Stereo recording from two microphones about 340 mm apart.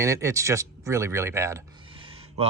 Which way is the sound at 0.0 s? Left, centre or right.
Centre.